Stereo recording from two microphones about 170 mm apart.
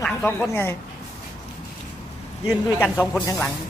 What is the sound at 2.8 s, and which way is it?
Speech, 10° left (ahead or behind).